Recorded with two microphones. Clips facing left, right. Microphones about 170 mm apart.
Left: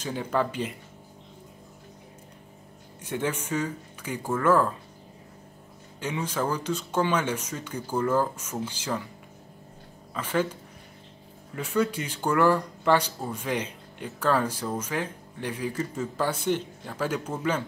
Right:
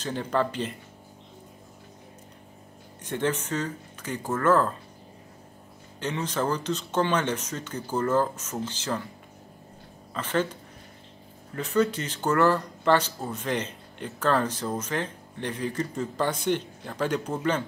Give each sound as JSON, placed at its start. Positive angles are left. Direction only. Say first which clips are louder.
{"t": 0.0, "sound": "speech", "louder": "right 1 dB", "side_deg": 10}
{"t": 3.0, "sound": "speech", "louder": "right 2 dB", "side_deg": 10}
{"t": 5.9, "sound": "speech", "louder": "right 1 dB", "side_deg": 10}
{"t": 10.1, "sound": "speech", "louder": "even", "side_deg": 10}
{"t": 11.5, "sound": "speech", "louder": "right 2 dB", "side_deg": 10}